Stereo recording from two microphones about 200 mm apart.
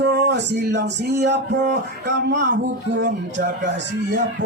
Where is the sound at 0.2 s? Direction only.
60° right (ahead or behind).